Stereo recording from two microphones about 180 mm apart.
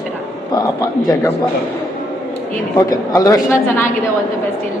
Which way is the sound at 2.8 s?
20° left (ahead or behind).